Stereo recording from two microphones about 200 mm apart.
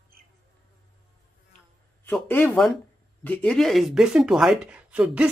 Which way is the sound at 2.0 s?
10° left (ahead or behind).